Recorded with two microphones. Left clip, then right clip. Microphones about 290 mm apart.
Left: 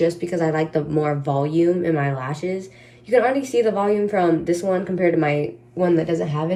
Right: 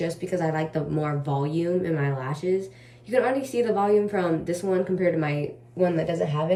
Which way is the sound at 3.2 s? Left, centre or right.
Centre.